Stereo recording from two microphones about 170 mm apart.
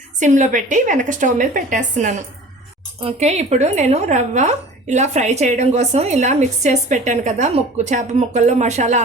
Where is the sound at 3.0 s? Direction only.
35° right (ahead or behind).